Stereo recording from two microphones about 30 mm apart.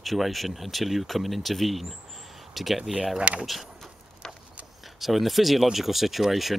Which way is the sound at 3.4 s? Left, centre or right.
Centre.